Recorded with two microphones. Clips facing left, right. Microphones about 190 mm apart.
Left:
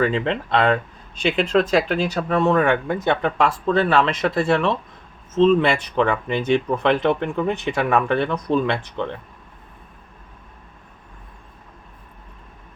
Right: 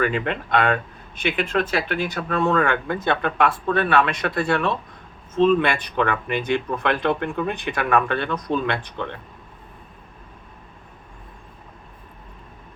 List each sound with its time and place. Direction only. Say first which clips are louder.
0.0 s speech: left 2 dB; 30° left (ahead or behind)